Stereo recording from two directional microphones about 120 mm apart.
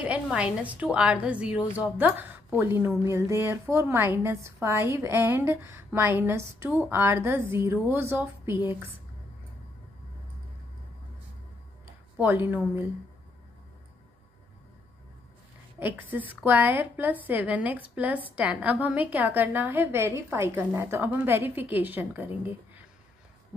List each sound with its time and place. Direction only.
0.0 s a woman's voice: 10° right (ahead or behind)
12.2 s a woman's voice: 15° right (ahead or behind)
15.8 s a woman's voice: 15° right (ahead or behind)